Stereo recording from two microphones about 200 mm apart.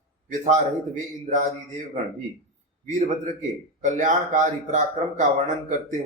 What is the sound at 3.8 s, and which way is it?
Speech, 40° right (ahead or behind).